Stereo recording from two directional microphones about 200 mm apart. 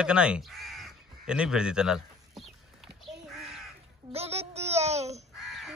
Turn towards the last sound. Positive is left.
turn(degrees=0)  # may be behind; listen again after turning